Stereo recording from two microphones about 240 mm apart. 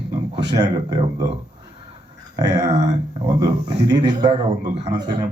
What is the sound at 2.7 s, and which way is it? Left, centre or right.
Speech, right.